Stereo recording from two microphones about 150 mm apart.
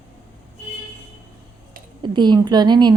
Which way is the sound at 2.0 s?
30° right (ahead or behind).